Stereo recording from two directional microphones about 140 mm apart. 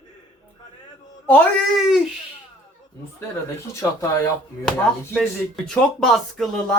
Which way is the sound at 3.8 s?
20° left (ahead or behind).